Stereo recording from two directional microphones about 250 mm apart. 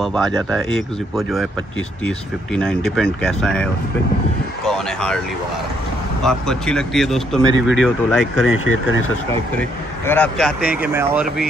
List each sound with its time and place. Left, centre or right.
0.0 s speech: centre
4.6 s speech: centre
6.2 s speech: centre
7.5 s speech: left
7.8 s speech: centre
9.6 s speech: centre